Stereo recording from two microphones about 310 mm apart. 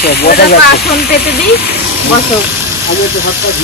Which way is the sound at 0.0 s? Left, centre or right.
Left.